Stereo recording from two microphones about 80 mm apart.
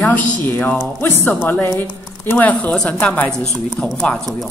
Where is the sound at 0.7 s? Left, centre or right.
Left.